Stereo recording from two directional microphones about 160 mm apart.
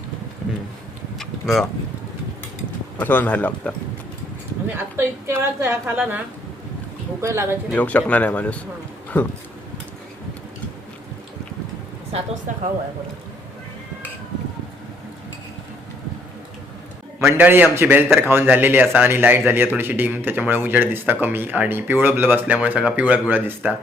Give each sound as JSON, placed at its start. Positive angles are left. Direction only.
{"t": 1.2, "sound": "a sound", "side_deg": 0}
{"t": 3.0, "sound": "speech", "side_deg": 10}
{"t": 4.7, "sound": "a man's voice", "side_deg": -15}
{"t": 7.7, "sound": "speech", "side_deg": 10}
{"t": 17.2, "sound": "a man's voice", "side_deg": -15}